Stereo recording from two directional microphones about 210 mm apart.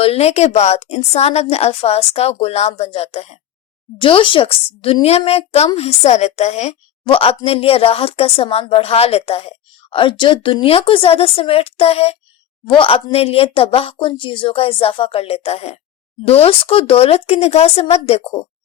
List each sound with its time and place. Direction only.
0.0 s speech: 30° left (ahead or behind)